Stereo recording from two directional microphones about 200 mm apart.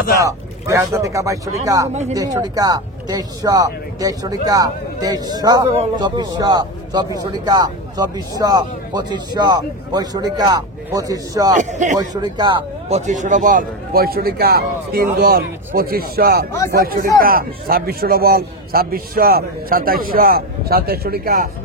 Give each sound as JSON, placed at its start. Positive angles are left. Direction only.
{"t": 0.2, "sound": "speech", "side_deg": -15}
{"t": 11.5, "sound": "speech", "side_deg": -35}
{"t": 12.0, "sound": "speech", "side_deg": -20}
{"t": 13.0, "sound": "a man's voice", "side_deg": -40}